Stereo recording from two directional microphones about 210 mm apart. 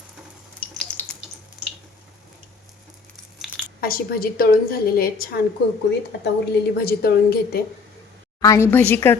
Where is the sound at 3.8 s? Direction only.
45° left (ahead or behind).